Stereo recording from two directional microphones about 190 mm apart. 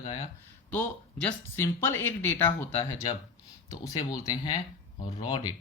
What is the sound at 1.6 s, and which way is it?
Speech, 15° left (ahead or behind).